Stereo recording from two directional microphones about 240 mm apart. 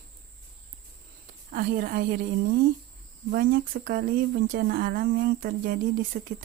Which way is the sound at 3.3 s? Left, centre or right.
Right.